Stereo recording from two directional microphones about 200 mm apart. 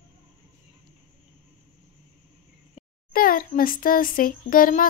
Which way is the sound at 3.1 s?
45° left (ahead or behind).